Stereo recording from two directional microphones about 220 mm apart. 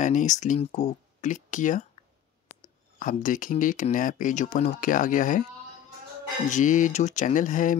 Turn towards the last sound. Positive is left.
turn(degrees=35)  # may be behind; listen again after turning